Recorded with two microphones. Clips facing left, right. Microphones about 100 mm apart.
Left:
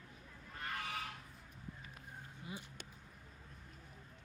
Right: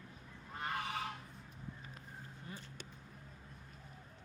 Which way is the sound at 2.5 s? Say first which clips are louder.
Left 3 dB; 10° left (ahead or behind).